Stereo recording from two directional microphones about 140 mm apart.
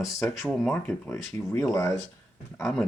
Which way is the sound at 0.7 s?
15° left (ahead or behind).